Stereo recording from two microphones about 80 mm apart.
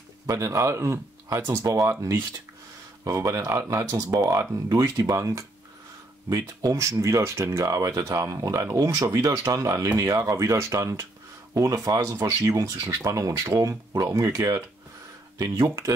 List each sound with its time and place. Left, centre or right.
0.3 s speech: right